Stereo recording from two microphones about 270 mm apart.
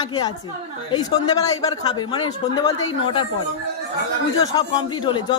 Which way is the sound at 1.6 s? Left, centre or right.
Centre.